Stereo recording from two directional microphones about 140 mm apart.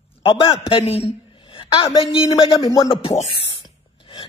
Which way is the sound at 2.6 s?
30° left (ahead or behind).